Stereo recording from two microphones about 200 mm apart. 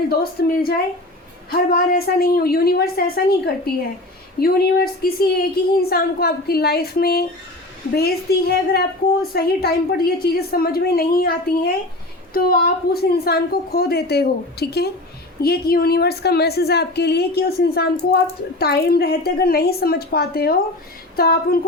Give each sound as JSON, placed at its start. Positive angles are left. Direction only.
{"t": 0.1, "sound": "a woman's voice", "side_deg": 50}